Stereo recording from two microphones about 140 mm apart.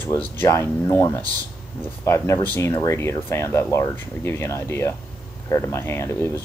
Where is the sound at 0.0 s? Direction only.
15° left (ahead or behind).